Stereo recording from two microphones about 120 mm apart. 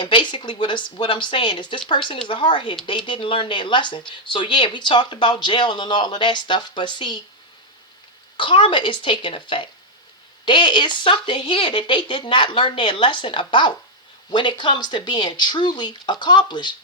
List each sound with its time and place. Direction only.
0.0 s speech: 40° left (ahead or behind)
8.4 s speech: 45° left (ahead or behind)